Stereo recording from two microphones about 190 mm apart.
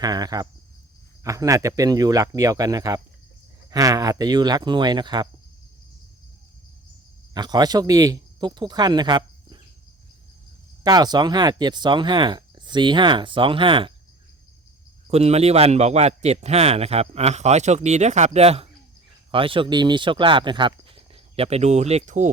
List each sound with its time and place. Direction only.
0.0 s speech: 20° right (ahead or behind)
7.3 s speech: 20° right (ahead or behind)
10.8 s speech: 20° right (ahead or behind)
15.0 s a man's voice: 35° right (ahead or behind)